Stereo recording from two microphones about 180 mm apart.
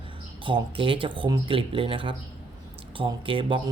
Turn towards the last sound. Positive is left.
turn(degrees=-30)  # may be behind; listen again after turning